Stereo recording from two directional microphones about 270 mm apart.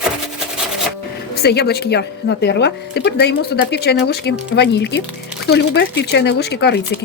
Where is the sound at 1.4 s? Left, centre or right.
Left.